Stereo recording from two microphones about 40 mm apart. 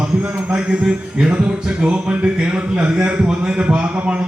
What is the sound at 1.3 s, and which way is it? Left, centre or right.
Speech, right.